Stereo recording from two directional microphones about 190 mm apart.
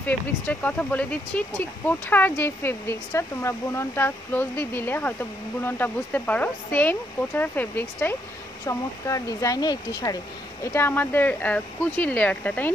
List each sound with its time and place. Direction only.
0.0 s speech: 10° left (ahead or behind)